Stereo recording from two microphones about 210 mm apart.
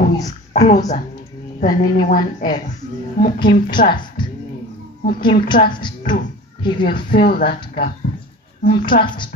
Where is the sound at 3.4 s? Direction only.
20° left (ahead or behind).